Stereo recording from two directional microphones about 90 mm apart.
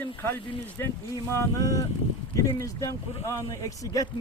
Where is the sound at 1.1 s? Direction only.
40° left (ahead or behind).